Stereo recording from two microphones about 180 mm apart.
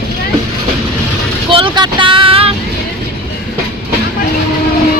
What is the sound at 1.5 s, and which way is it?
Vehicle, 30° right (ahead or behind).